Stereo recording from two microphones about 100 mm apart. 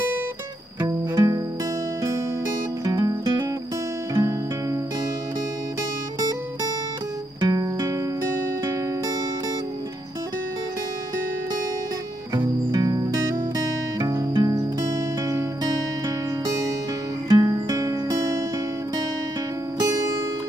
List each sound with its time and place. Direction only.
0.7 s music: 40° right (ahead or behind)
2.8 s music: 35° right (ahead or behind)
7.3 s music: 40° right (ahead or behind)
12.7 s music: 35° right (ahead or behind)
17.3 s music: 40° right (ahead or behind)
19.8 s music: 30° right (ahead or behind)